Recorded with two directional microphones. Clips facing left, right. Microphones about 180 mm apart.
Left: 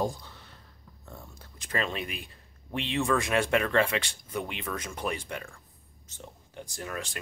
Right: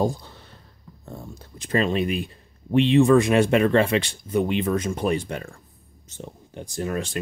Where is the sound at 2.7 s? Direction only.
25° right (ahead or behind).